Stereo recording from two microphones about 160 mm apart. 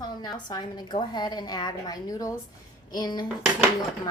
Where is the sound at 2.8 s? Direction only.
25° left (ahead or behind).